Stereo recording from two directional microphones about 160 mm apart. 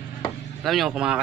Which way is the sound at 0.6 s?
Centre (ahead or behind).